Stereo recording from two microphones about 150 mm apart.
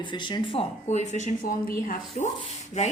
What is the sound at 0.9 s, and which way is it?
Speech, 50° left (ahead or behind).